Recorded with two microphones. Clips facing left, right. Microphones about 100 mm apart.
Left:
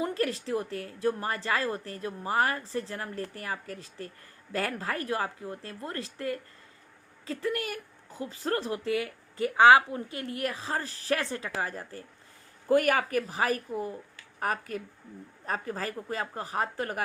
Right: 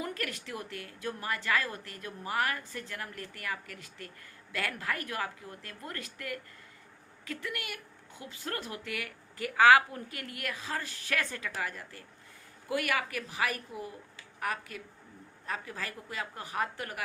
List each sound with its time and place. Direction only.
0.0 s a woman's voice: 30° left (ahead or behind)